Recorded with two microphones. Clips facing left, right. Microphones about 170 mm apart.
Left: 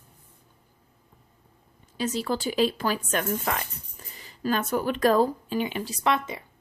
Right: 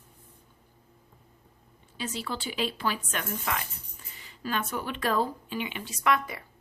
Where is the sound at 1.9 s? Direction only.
40° left (ahead or behind).